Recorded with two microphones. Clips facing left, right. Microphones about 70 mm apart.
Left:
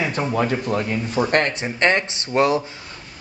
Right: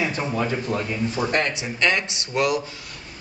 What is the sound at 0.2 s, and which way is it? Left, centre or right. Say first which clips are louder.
Speech: left 3 dB; left.